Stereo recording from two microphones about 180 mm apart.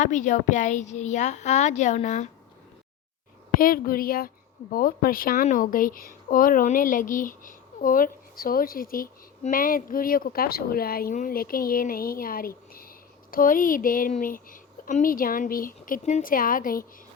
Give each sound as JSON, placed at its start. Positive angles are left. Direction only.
{"t": 0.0, "sound": "speech", "side_deg": 45}
{"t": 3.6, "sound": "speech", "side_deg": 55}